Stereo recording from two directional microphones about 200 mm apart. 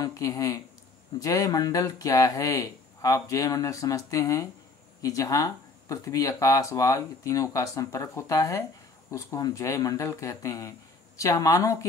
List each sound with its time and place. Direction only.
0.0 s speech: 20° left (ahead or behind)